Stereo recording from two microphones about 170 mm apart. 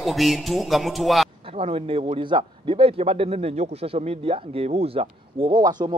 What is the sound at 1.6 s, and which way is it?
A man's voice, 35° right (ahead or behind).